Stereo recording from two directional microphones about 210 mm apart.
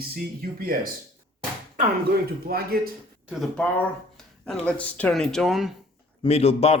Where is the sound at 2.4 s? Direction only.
45° right (ahead or behind).